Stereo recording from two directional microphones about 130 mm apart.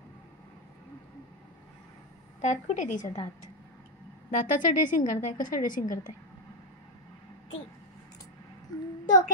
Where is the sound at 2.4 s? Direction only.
70° left (ahead or behind).